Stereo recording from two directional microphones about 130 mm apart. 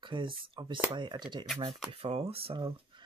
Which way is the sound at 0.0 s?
40° right (ahead or behind).